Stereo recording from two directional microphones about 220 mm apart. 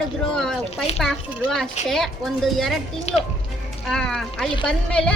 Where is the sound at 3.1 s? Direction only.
30° left (ahead or behind).